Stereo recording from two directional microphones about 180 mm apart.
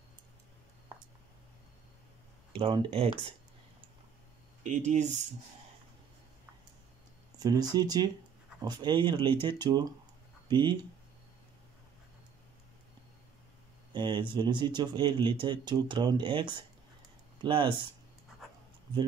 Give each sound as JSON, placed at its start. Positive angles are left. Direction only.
{"t": 2.5, "sound": "speech", "side_deg": -30}
{"t": 4.6, "sound": "speech", "side_deg": -40}
{"t": 7.3, "sound": "speech", "side_deg": -20}
{"t": 13.9, "sound": "speech", "side_deg": -25}